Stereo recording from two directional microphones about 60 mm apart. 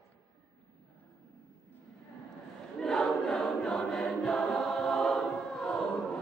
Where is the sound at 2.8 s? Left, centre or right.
Centre.